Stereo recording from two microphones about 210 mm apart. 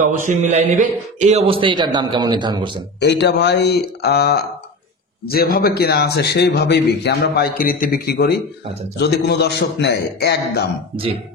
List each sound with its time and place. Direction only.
0.0 s a man's voice: 35° right (ahead or behind)
3.0 s a man's voice: 55° left (ahead or behind)